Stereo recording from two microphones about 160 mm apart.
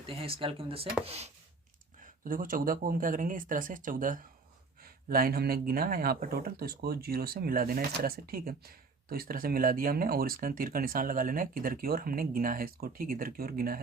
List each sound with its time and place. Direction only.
0.0 s speech: 35° right (ahead or behind)
2.0 s speech: 60° right (ahead or behind)